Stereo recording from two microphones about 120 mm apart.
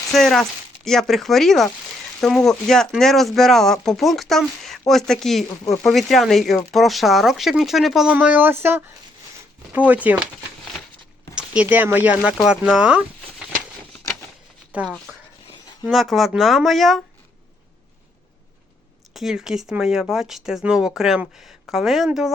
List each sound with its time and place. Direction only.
0.1 s speech: centre (ahead or behind)
8.1 s speech: 10° right (ahead or behind)
11.3 s speech: 10° right (ahead or behind)
14.7 s speech: 10° right (ahead or behind)
19.1 s speech: 5° right (ahead or behind)